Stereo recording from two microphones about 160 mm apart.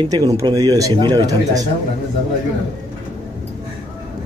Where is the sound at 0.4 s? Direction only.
25° right (ahead or behind).